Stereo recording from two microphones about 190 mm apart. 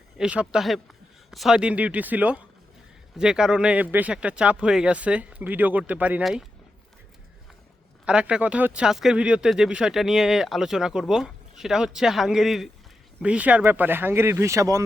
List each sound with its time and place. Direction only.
0.2 s speech: 5° right (ahead or behind)
8.0 s speech: 5° right (ahead or behind)